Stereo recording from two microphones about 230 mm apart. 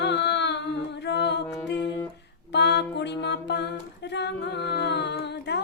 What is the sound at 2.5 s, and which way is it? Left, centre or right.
Mantra, left.